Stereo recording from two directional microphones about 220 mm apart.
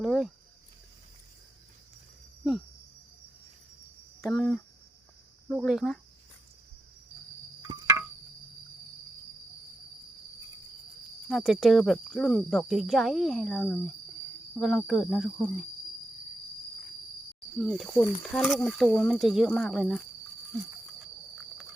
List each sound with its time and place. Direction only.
0.0 s speech: centre (ahead or behind)
4.3 s speech: centre (ahead or behind)
7.6 s a sound: 15° right (ahead or behind)
11.3 s speech: centre (ahead or behind)
17.6 s speech: centre (ahead or behind)